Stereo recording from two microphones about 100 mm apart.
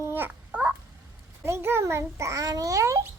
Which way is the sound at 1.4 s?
25° right (ahead or behind).